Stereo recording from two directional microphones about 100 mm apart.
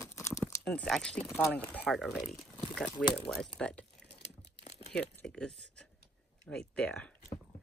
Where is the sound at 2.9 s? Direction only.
55° left (ahead or behind).